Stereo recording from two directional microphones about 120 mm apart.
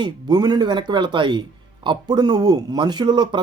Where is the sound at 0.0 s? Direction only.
35° right (ahead or behind).